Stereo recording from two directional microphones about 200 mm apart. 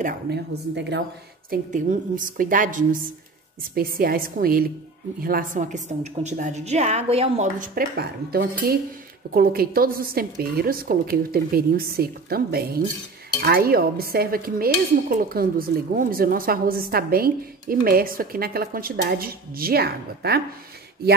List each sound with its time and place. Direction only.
0.0 s a woman's voice: 55° right (ahead or behind)
1.5 s dishes: 40° right (ahead or behind)
5.2 s a woman's voice: 45° right (ahead or behind)
9.3 s dishes: 45° right (ahead or behind)